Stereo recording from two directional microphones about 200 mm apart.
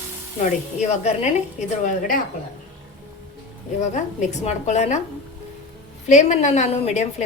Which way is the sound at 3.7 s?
35° left (ahead or behind).